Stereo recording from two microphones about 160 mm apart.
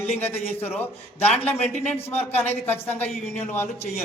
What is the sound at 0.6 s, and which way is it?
Speech, 15° left (ahead or behind).